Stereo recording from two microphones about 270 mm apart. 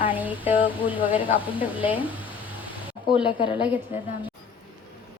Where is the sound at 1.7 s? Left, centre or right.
Centre.